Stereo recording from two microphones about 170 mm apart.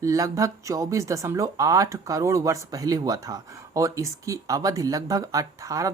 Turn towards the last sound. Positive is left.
turn(degrees=-20)  # may be behind; listen again after turning